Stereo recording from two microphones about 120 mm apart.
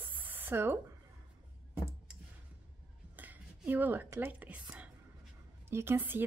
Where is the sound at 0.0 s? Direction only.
15° right (ahead or behind).